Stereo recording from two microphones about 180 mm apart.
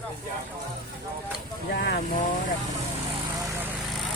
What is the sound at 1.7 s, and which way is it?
Speech, 60° left (ahead or behind).